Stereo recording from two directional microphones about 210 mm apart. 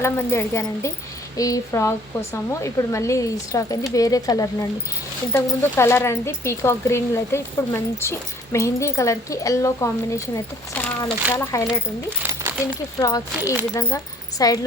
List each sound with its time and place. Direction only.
0.0 s speech: 10° left (ahead or behind)
12.2 s a sound: 10° right (ahead or behind)
13.0 s speech: 15° left (ahead or behind)